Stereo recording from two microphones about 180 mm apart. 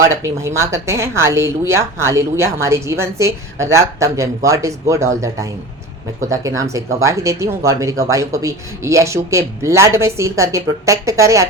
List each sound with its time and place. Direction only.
0.1 s speech: 15° right (ahead or behind)